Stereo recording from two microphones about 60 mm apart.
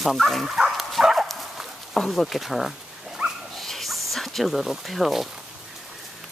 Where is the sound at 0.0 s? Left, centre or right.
Centre.